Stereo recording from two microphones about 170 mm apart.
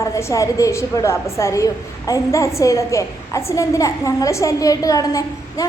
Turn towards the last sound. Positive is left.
turn(degrees=20)  # may be behind; listen again after turning